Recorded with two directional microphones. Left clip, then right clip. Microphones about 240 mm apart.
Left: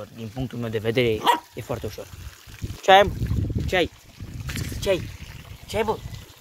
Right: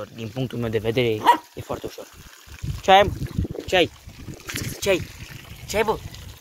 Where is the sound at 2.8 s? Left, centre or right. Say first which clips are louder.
Even; centre.